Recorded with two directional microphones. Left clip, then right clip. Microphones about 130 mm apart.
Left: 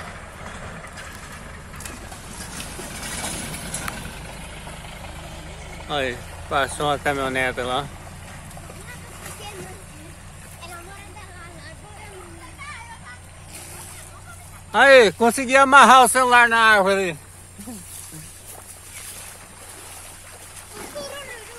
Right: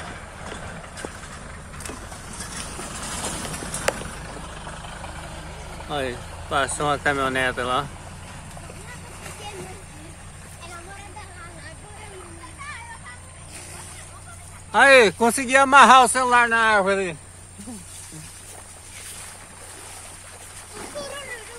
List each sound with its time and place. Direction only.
0.0 s vehicle: 90° left
2.5 s boat: 60° left (ahead or behind)
4.6 s vehicle: 20° left (ahead or behind)
5.6 s vehicle: 10° left (ahead or behind)
5.9 s speech: 5° right (ahead or behind)
9.2 s a sound: 20° left (ahead or behind)
14.7 s speech: 10° left (ahead or behind); by 17.1 s 90° left
20.7 s splash: centre (ahead or behind)